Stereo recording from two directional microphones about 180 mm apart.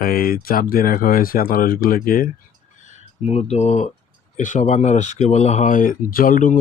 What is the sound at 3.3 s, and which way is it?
Speech, 35° left (ahead or behind).